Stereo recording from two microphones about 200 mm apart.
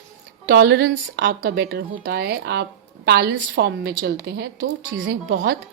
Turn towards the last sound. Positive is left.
turn(degrees=-65)  # may be behind; listen again after turning